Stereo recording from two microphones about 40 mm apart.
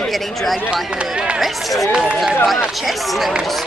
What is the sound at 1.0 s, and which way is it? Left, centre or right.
Speech, right.